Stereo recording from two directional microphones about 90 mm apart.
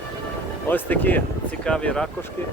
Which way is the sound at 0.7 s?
20° left (ahead or behind).